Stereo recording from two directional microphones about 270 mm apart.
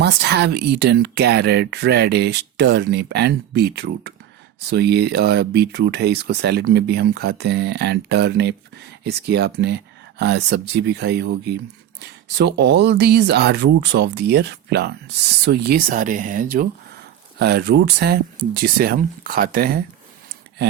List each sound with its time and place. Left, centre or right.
0.0 s speech: right
11.9 s a sound: right
12.5 s speech: right